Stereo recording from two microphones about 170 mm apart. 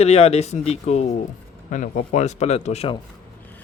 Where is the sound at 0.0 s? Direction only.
40° left (ahead or behind).